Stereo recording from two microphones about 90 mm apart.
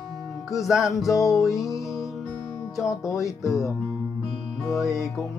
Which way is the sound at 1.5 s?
35° left (ahead or behind).